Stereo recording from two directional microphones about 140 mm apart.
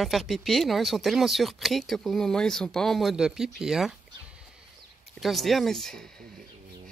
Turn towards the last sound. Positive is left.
turn(degrees=5)  # may be behind; listen again after turning